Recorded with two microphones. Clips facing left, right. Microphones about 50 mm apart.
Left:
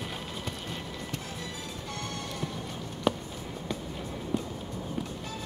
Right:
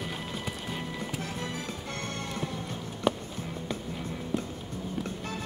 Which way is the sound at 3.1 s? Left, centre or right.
Centre.